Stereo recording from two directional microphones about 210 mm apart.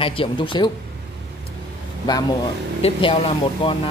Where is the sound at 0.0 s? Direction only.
25° left (ahead or behind).